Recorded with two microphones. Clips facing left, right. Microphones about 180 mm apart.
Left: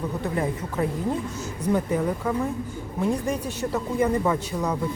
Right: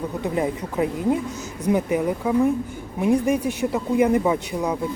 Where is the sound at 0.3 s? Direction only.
15° right (ahead or behind).